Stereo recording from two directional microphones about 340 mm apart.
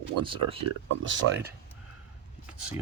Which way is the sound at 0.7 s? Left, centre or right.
Right.